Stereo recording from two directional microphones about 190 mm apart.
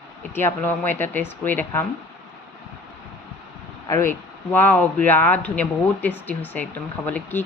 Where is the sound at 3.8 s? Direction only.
15° left (ahead or behind).